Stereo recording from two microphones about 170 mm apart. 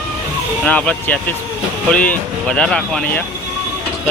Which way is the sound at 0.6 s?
10° left (ahead or behind).